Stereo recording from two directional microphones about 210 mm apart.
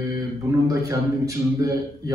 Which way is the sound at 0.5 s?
15° right (ahead or behind).